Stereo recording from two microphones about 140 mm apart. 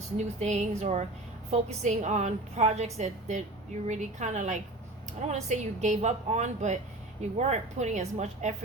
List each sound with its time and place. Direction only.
0.2 s a woman's voice: 55° right (ahead or behind)